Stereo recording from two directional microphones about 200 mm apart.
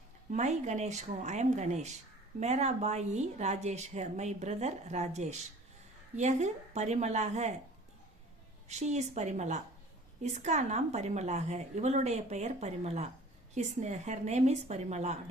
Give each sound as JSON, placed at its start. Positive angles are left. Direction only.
{"t": 0.3, "sound": "a woman's voice", "side_deg": -35}
{"t": 8.7, "sound": "a woman's voice", "side_deg": -35}